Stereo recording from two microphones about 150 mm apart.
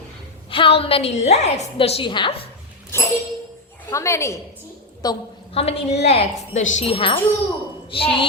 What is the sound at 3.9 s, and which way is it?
A woman's voice, 20° left (ahead or behind).